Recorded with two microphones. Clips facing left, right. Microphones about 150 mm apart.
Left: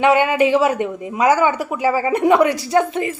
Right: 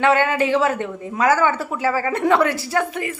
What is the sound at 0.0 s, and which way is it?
Speech, 15° left (ahead or behind).